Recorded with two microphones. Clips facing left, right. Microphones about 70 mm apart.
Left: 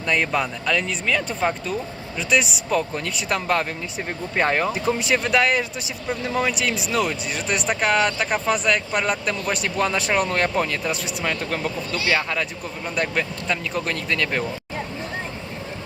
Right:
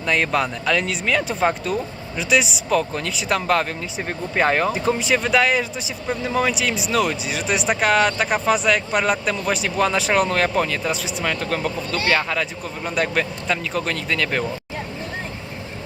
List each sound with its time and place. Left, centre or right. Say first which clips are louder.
0.0 s speech: right 2 dB; centre